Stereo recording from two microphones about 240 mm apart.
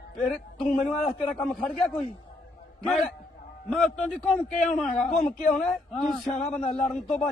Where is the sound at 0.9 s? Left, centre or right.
Left.